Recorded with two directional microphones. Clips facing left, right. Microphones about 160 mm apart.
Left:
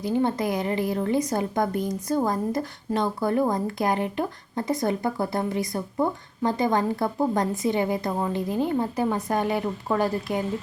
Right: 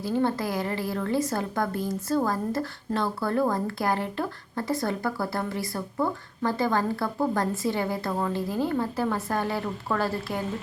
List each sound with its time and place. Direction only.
0.0 s a woman's voice: 20° left (ahead or behind)